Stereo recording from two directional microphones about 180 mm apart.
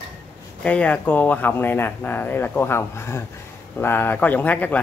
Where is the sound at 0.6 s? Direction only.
5° left (ahead or behind).